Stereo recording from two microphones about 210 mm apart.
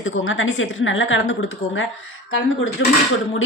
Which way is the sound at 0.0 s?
65° left (ahead or behind).